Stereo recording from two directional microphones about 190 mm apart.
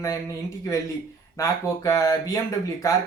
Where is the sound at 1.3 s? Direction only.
15° left (ahead or behind).